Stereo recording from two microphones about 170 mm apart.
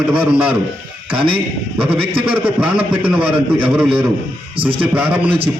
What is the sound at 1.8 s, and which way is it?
Speech, 35° right (ahead or behind).